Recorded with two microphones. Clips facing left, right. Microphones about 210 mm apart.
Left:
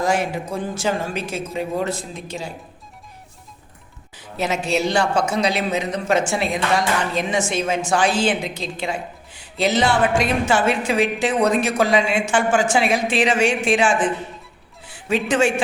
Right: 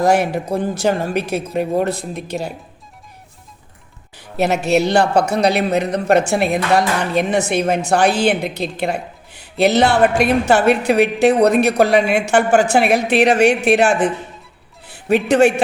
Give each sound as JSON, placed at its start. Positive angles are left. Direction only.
{"t": 0.0, "sound": "a woman's voice", "side_deg": -65}
{"t": 4.2, "sound": "a woman's voice", "side_deg": -65}
{"t": 15.1, "sound": "a woman's voice", "side_deg": -60}